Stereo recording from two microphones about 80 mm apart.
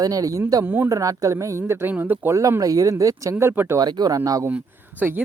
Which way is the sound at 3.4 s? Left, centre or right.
Right.